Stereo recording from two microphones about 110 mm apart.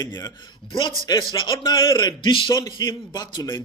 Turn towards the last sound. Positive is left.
turn(degrees=40)  # may be behind; listen again after turning